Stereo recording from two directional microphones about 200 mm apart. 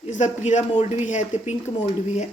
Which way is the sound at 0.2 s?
35° left (ahead or behind).